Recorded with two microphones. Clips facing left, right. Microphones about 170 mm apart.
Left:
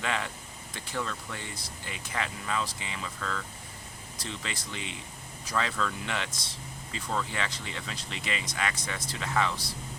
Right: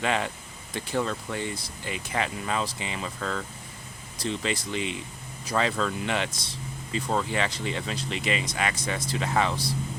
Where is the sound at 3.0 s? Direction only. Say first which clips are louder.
Right 4 dB; 35° right (ahead or behind).